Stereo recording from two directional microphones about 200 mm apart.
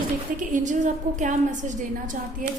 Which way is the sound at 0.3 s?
40° right (ahead or behind).